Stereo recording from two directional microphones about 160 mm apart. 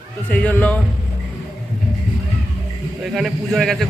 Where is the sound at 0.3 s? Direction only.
10° left (ahead or behind).